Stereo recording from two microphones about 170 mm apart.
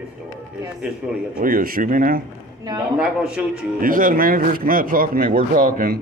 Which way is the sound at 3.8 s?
55° right (ahead or behind).